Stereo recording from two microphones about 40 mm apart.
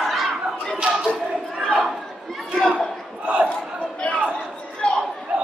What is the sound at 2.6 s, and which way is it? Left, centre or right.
Chatter, centre.